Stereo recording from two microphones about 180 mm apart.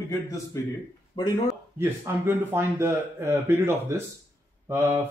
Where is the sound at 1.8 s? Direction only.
10° right (ahead or behind).